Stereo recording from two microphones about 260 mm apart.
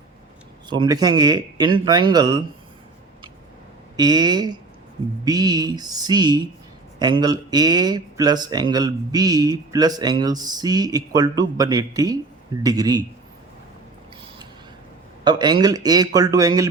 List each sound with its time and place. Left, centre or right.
0.7 s speech: centre
3.9 s speech: centre
15.2 s speech: centre